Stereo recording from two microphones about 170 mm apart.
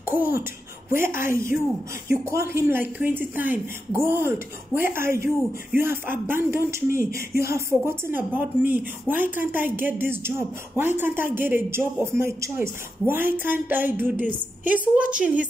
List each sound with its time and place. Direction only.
0.0 s speech: 15° right (ahead or behind)